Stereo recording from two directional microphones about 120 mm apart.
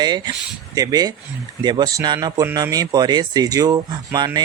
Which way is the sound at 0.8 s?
35° right (ahead or behind).